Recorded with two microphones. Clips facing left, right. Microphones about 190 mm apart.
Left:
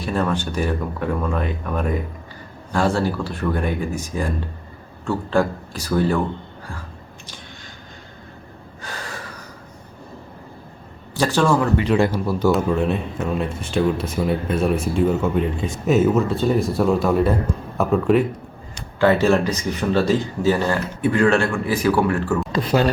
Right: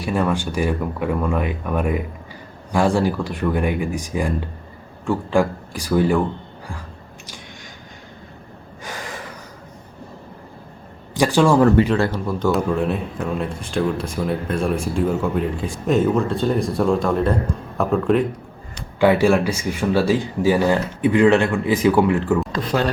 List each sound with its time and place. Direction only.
0.0 s speech: 10° right (ahead or behind)
8.8 s gasp: 15° right (ahead or behind)
11.2 s speech: 10° right (ahead or behind)
11.9 s a man's voice: 15° left (ahead or behind)
18.9 s speech: 15° right (ahead or behind)
22.4 s speech: 5° left (ahead or behind)